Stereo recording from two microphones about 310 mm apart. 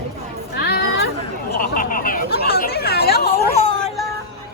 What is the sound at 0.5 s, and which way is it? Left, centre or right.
Chatter, left.